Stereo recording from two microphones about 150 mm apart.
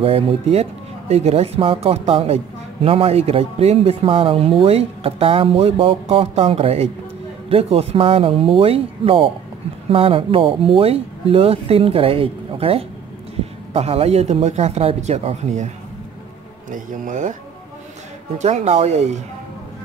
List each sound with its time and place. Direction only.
0.0 s speech: 40° right (ahead or behind)
16.7 s speech: 60° right (ahead or behind)
18.4 s speech: 50° right (ahead or behind)